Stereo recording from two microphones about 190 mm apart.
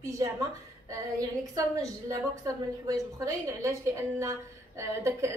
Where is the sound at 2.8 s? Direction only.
20° right (ahead or behind).